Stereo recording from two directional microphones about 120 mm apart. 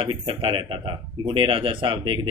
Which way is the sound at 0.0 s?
45° right (ahead or behind).